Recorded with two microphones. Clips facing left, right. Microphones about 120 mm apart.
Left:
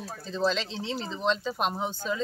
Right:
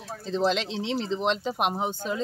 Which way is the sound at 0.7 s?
20° right (ahead or behind).